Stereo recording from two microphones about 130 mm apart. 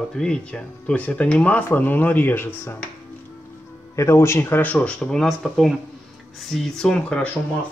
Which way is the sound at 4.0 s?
20° left (ahead or behind).